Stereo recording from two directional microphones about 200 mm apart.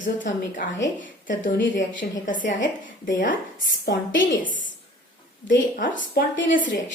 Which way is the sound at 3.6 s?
70° left (ahead or behind).